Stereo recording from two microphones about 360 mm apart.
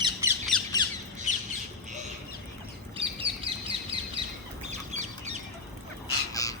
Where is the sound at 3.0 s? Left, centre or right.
Centre.